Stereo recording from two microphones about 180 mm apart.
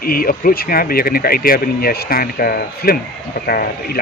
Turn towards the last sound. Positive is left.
turn(degrees=55)  # may be behind; listen again after turning